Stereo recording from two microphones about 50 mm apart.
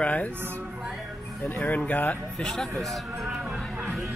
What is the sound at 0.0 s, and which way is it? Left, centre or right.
Speech, left.